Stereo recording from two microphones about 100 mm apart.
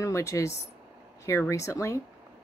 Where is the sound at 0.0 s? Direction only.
30° left (ahead or behind).